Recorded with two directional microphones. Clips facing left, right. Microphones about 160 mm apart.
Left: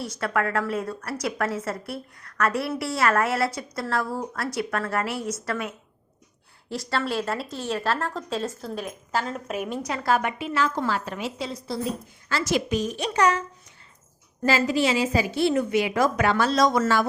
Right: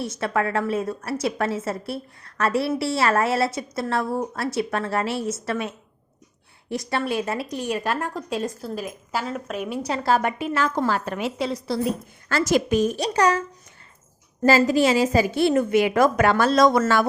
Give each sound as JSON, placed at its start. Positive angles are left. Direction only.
{"t": 0.0, "sound": "a woman's voice", "side_deg": -25}
{"t": 9.8, "sound": "a woman's voice", "side_deg": -30}
{"t": 12.3, "sound": "a woman's voice", "side_deg": -45}
{"t": 13.0, "sound": "a child's voice", "side_deg": -35}
{"t": 14.4, "sound": "a woman's voice", "side_deg": -45}